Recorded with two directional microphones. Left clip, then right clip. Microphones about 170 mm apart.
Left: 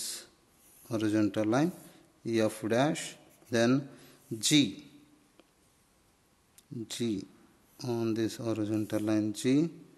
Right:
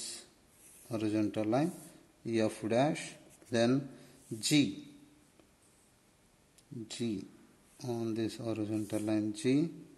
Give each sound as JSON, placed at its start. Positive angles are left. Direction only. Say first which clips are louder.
{"t": 0.0, "sound": "snort", "louder": "left 4 dB", "side_deg": 20}
{"t": 0.8, "sound": "a man's voice", "louder": "left 4 dB", "side_deg": 20}
{"t": 6.9, "sound": "speech", "louder": "left 4 dB", "side_deg": 20}